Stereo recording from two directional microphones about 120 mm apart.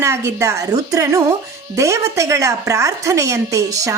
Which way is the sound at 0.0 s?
25° right (ahead or behind).